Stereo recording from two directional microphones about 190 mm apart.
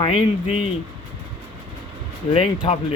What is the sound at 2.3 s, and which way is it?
Speech, 30° left (ahead or behind).